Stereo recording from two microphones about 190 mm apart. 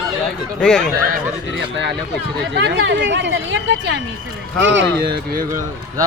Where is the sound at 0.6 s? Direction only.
5° left (ahead or behind).